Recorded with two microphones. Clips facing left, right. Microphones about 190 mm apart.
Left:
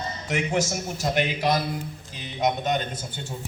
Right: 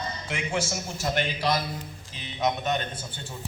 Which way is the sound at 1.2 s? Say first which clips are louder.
Left 3 dB; 15° left (ahead or behind).